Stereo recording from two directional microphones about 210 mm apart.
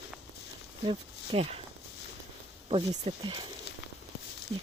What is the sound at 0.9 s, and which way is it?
Speech, 25° right (ahead or behind).